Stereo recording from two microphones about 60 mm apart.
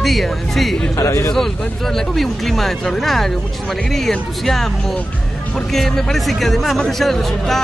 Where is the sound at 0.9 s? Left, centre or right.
Left.